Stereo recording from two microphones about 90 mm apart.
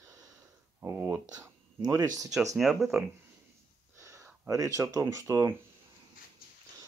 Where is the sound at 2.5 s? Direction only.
Centre (ahead or behind).